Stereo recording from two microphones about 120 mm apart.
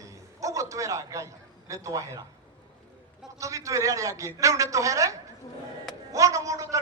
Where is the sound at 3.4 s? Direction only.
25° right (ahead or behind).